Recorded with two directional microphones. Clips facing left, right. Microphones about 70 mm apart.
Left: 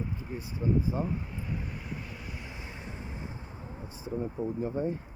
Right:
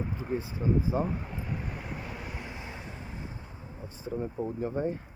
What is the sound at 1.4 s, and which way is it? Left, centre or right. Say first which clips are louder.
Vehicle: right 1 dB; centre.